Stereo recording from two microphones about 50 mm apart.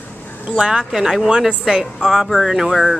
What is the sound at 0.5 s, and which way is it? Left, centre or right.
A woman's voice, centre.